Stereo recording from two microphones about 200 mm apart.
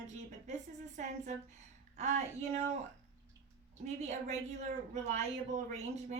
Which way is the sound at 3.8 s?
35° right (ahead or behind).